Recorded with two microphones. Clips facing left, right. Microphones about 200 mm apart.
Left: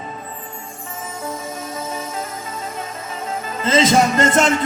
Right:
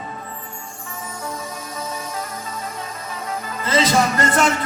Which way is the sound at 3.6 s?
20° left (ahead or behind).